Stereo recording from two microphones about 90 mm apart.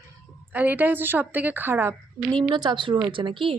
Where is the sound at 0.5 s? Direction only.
20° right (ahead or behind).